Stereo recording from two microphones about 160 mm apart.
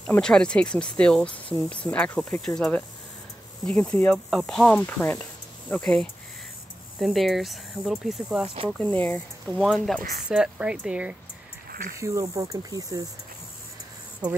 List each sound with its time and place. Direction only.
0.0 s speech: 5° left (ahead or behind)
8.7 s speech: 10° left (ahead or behind); by 11.1 s 5° right (ahead or behind)
12.0 s speech: 20° right (ahead or behind)